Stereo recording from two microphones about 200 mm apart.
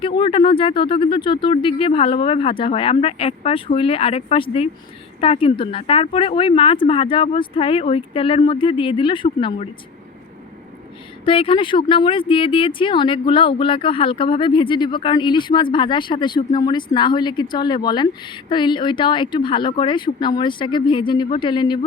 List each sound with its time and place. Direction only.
0.0 s speech: 25° left (ahead or behind)
11.3 s speech: 25° left (ahead or behind)